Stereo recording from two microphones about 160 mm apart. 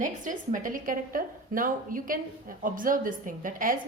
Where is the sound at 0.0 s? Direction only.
55° right (ahead or behind).